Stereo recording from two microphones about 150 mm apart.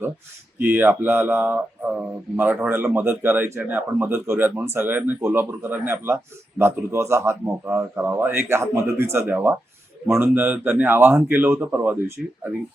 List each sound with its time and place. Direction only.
0.6 s a man's voice: 15° right (ahead or behind)